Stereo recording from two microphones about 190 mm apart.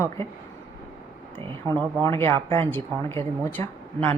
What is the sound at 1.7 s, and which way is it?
Speech, 20° right (ahead or behind).